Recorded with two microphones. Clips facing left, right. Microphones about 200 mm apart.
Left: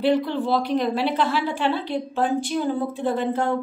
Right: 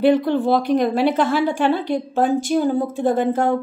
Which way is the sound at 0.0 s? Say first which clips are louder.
Right 5 dB; 50° right (ahead or behind).